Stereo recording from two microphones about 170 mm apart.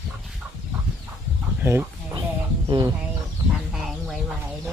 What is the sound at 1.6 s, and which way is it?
Speech, 15° right (ahead or behind).